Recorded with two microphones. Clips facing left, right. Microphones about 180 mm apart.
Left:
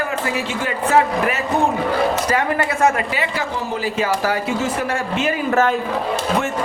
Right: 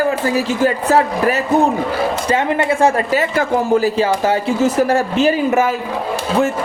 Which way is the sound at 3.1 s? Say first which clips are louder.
Right 7 dB; 45° right (ahead or behind).